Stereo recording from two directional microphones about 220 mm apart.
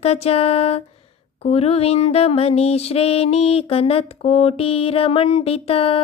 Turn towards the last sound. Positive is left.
turn(degrees=25)  # may be behind; listen again after turning